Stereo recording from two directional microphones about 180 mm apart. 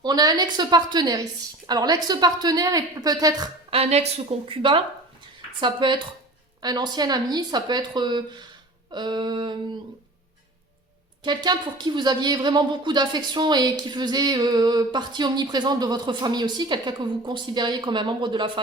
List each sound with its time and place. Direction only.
0.0 s a woman's voice: 20° right (ahead or behind)
3.7 s a woman's voice: 35° right (ahead or behind)
11.2 s a woman's voice: 25° right (ahead or behind)